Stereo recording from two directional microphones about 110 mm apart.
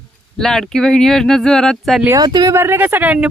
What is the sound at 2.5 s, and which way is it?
Speech, 20° right (ahead or behind).